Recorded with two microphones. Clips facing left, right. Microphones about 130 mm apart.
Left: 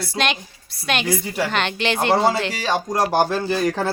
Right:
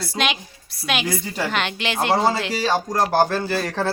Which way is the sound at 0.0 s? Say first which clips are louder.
Left 1 dB; centre (ahead or behind).